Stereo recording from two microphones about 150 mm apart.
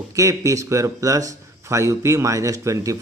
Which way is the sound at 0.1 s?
20° right (ahead or behind).